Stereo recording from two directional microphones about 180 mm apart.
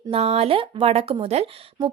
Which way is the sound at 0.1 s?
35° right (ahead or behind).